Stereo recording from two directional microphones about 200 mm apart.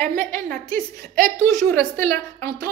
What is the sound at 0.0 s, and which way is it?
A woman's voice, 40° right (ahead or behind).